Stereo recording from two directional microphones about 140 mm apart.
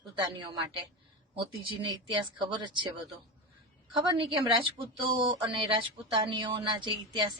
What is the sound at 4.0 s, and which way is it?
Speech, 35° right (ahead or behind).